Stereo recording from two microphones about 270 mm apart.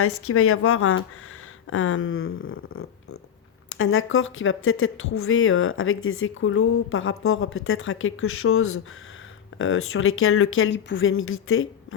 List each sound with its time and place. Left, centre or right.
0.0 s speech: left